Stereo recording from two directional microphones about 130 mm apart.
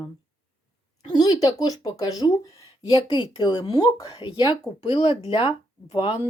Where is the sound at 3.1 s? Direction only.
40° left (ahead or behind).